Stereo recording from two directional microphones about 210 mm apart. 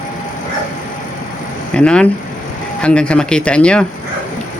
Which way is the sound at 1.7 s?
5° left (ahead or behind).